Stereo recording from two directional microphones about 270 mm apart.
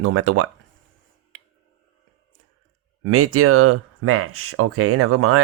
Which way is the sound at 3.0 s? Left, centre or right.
Right.